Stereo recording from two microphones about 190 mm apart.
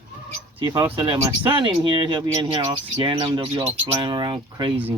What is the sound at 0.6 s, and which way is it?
Speech, 20° right (ahead or behind).